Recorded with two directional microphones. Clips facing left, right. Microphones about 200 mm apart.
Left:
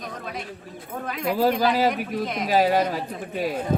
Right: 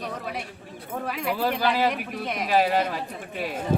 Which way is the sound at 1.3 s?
40° left (ahead or behind).